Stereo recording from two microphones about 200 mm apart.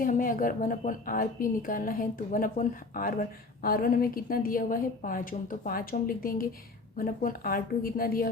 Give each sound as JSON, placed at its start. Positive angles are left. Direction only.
{"t": 0.0, "sound": "a woman's voice", "side_deg": 45}